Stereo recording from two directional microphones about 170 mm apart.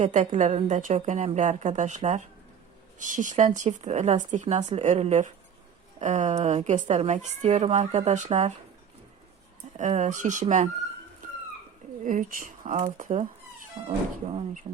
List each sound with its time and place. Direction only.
0.0 s a woman's voice: 45° right (ahead or behind)
9.7 s a woman's voice: 45° right (ahead or behind)
12.0 s a woman's voice: 50° right (ahead or behind)
13.8 s speech: 30° right (ahead or behind)